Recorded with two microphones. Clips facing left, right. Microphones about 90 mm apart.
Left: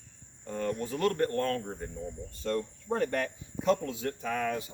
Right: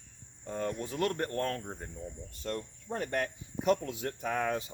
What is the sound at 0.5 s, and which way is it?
Cricket, 20° right (ahead or behind).